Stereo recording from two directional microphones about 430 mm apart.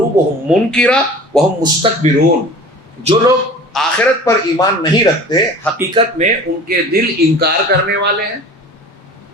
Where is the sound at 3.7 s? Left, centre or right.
Centre.